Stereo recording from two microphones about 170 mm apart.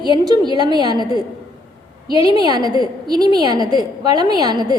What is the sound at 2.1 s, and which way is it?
A woman's voice, 25° right (ahead or behind).